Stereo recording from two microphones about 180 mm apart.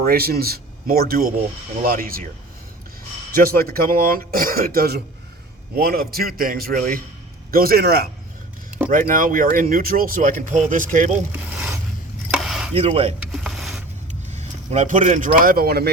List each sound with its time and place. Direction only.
0.0 s speech: 55° right (ahead or behind)
3.3 s speech: 55° right (ahead or behind)
8.9 s speech: 50° right (ahead or behind)
11.3 s a sound: 10° right (ahead or behind)
12.3 s chopping: centre (ahead or behind)
12.7 s speech: 35° right (ahead or behind)
13.3 s mechanisms: centre (ahead or behind)
14.1 s speech: 40° right (ahead or behind); by 15.9 s 60° right (ahead or behind)